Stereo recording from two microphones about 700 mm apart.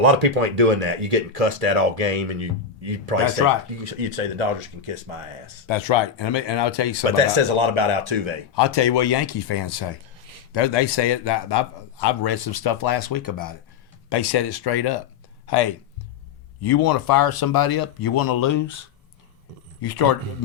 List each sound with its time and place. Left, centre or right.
0.0 s speech: right
5.6 s a man's voice: left
7.3 s speech: right
8.5 s a man's voice: left
19.8 s a man's voice: left